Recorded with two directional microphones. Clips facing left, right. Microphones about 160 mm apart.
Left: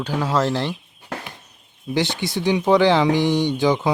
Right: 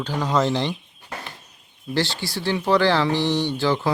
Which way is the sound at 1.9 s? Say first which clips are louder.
Left 3 dB; 20° left (ahead or behind).